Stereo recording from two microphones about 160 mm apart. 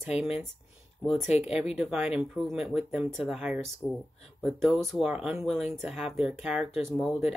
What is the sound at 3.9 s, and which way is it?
Speech, 5° left (ahead or behind).